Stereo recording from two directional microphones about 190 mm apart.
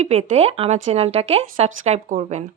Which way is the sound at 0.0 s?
35° right (ahead or behind).